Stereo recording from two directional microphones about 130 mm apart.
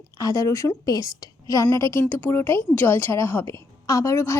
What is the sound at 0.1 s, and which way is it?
A woman's voice, 25° left (ahead or behind).